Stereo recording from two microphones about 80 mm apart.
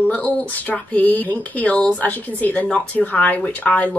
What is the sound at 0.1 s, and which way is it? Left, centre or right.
Speech, centre.